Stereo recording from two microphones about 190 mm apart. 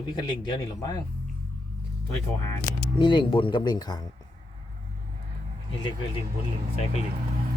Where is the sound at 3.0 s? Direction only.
25° left (ahead or behind).